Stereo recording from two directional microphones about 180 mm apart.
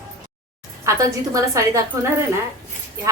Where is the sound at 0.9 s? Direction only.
20° right (ahead or behind).